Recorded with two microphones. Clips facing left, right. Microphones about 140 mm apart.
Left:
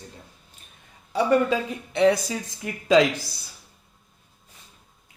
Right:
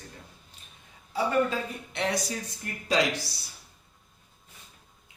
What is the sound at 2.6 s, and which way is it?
Speech, 90° left.